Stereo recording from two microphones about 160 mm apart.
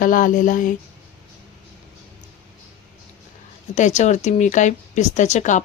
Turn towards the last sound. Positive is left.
turn(degrees=50)  # may be behind; listen again after turning